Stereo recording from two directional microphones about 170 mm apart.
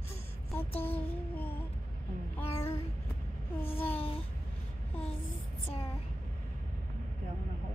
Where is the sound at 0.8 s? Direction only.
10° left (ahead or behind).